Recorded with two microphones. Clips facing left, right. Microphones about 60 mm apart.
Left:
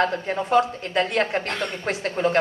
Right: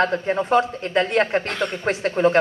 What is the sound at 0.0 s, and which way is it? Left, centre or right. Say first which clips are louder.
Speech: right 3 dB; right.